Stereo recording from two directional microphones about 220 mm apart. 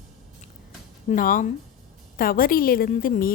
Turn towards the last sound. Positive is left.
turn(degrees=40)  # may be behind; listen again after turning